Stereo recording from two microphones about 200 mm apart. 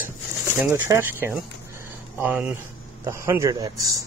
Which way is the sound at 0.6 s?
15° right (ahead or behind).